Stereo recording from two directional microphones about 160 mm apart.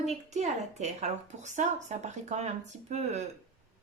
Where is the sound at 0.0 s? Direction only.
45° right (ahead or behind).